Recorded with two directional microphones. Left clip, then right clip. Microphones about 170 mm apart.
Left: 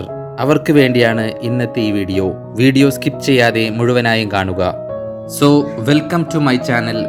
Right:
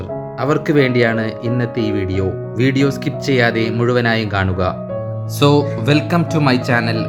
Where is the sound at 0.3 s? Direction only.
40° left (ahead or behind).